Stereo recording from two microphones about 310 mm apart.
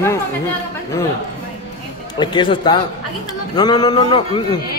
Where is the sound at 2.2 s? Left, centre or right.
Centre.